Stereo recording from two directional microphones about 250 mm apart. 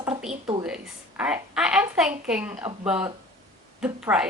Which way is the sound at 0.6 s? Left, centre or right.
Centre.